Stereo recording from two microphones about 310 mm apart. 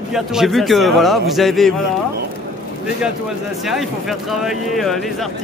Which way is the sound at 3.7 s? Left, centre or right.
Centre.